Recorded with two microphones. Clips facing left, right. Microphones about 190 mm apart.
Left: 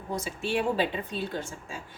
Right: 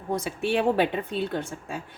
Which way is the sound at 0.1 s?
60° right (ahead or behind).